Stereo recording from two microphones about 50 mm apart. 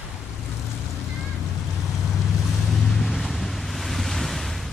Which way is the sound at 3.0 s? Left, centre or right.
Centre.